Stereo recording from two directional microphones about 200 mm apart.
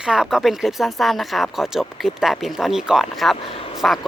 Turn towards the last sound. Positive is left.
turn(degrees=0)  # may be behind; listen again after turning